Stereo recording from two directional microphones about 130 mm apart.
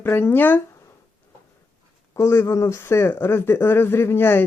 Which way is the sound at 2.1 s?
20° left (ahead or behind).